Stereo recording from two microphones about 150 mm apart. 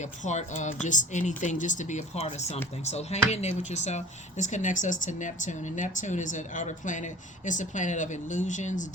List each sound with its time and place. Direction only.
0.0 s speech: 50° left (ahead or behind)